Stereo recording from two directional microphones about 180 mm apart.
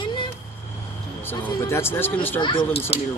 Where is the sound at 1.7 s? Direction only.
15° left (ahead or behind).